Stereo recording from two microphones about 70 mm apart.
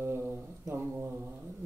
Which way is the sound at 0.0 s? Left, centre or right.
Right.